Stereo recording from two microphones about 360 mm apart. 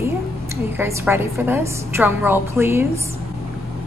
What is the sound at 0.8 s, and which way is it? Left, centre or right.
Music, centre.